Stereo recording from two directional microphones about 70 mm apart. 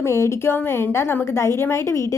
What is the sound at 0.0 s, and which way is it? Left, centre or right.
A woman's voice, left.